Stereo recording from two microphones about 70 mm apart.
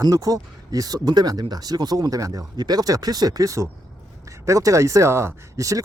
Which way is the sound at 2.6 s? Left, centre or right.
Right.